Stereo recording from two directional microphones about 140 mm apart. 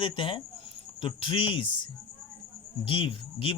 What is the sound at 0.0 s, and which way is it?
Speech, 40° left (ahead or behind).